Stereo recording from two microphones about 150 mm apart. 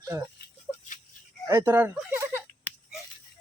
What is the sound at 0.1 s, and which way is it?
Speech, 20° right (ahead or behind).